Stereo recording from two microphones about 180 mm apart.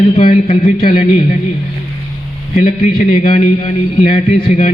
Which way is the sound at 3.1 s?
40° left (ahead or behind).